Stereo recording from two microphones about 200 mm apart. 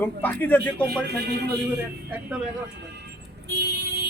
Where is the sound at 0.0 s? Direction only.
10° left (ahead or behind).